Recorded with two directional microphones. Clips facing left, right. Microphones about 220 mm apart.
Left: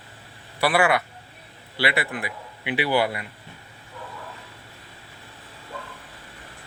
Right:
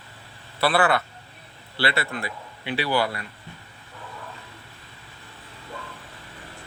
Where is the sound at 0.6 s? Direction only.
15° left (ahead or behind).